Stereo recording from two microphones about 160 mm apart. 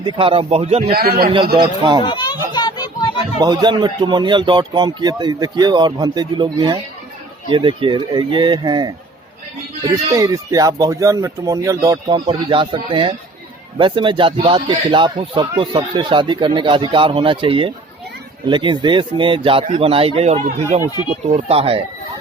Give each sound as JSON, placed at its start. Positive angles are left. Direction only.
{"t": 0.0, "sound": "speech", "side_deg": -30}
{"t": 0.9, "sound": "a man's voice", "side_deg": -75}
{"t": 1.5, "sound": "speech", "side_deg": -30}
{"t": 2.0, "sound": "children playing", "side_deg": 30}
{"t": 3.3, "sound": "speech", "side_deg": -25}